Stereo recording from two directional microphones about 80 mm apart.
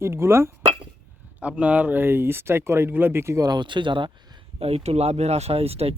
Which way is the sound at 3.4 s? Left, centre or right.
Right.